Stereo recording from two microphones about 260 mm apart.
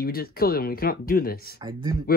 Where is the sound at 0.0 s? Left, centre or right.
Left.